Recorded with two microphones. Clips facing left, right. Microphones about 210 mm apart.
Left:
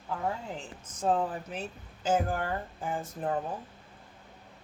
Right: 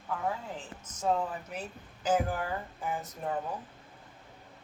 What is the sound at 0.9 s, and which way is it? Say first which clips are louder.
Speech: left 2 dB; 30° left (ahead or behind).